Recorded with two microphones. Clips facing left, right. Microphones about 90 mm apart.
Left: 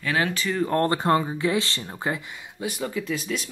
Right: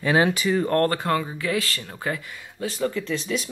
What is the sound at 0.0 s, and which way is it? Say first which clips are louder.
Speech: right 5 dB; 20° right (ahead or behind).